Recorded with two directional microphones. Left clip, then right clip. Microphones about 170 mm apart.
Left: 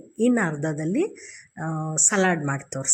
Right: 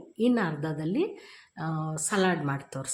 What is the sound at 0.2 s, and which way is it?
Speech, 15° left (ahead or behind).